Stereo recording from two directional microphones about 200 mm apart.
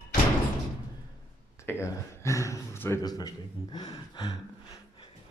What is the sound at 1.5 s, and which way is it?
Speech, 15° left (ahead or behind).